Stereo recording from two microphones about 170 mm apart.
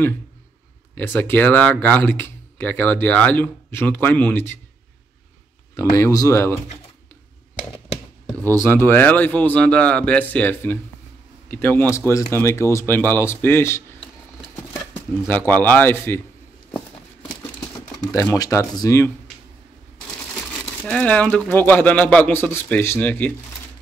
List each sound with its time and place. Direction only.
0.9 s speech: 10° left (ahead or behind)
5.8 s speech: 15° left (ahead or behind)
8.5 s speech: 15° left (ahead or behind)
18.1 s speech: 20° left (ahead or behind)
20.8 s speech: 5° left (ahead or behind)